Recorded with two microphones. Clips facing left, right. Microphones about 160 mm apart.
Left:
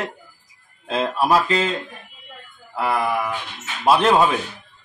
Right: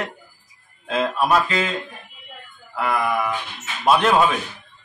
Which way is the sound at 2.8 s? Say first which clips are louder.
Left 1 dB; 30° left (ahead or behind).